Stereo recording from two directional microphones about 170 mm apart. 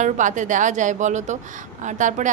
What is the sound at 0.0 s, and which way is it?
A woman's voice, 45° right (ahead or behind).